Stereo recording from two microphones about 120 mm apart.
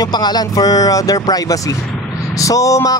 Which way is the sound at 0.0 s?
35° left (ahead or behind).